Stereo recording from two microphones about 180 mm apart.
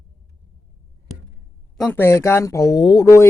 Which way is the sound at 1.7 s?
Centre (ahead or behind).